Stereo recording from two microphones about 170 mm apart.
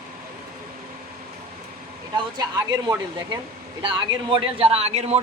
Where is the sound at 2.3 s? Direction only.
20° right (ahead or behind).